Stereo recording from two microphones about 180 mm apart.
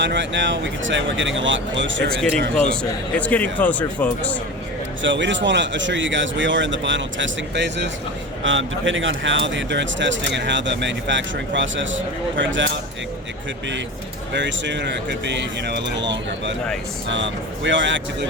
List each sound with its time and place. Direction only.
0.0 s speech: 80° right
3.2 s speech: 10° left (ahead or behind)
5.0 s speech: 85° right
8.4 s speech: 90° right
14.3 s speech: 80° right